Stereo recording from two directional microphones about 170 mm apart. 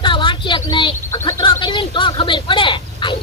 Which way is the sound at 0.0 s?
30° left (ahead or behind).